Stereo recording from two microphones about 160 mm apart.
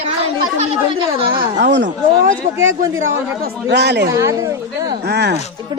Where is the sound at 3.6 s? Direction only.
90° right.